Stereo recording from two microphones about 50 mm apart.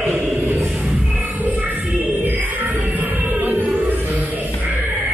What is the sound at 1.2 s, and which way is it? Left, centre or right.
Music, right.